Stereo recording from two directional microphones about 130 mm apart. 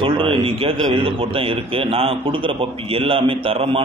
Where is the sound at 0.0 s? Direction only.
45° right (ahead or behind).